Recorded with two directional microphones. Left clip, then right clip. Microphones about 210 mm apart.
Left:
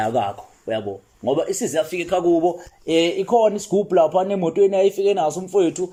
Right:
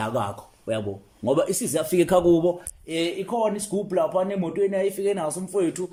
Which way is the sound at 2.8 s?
Centre (ahead or behind).